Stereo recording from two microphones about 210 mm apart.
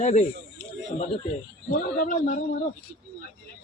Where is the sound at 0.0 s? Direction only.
35° left (ahead or behind).